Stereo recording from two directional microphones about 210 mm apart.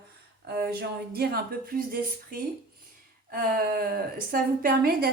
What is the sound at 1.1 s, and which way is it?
A woman's voice, 45° right (ahead or behind).